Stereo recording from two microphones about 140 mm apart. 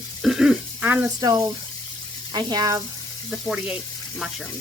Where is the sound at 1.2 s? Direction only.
25° right (ahead or behind).